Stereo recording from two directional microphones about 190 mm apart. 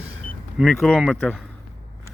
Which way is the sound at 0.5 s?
Centre (ahead or behind).